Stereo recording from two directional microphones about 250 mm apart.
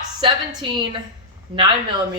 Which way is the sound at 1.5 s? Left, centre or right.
Centre.